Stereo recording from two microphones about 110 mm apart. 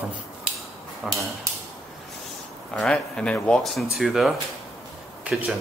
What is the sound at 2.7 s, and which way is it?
Speech, 5° left (ahead or behind).